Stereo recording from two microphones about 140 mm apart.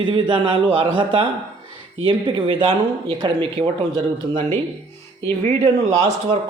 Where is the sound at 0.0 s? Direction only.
35° right (ahead or behind).